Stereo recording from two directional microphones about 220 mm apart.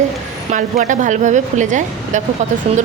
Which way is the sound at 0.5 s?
35° right (ahead or behind).